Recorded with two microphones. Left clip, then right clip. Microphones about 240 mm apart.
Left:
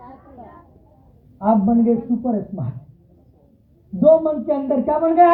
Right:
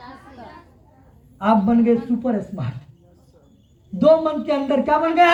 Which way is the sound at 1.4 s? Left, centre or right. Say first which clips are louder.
Even; right.